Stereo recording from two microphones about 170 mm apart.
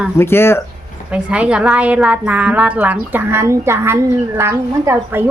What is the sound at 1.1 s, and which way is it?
A woman's voice, 5° right (ahead or behind).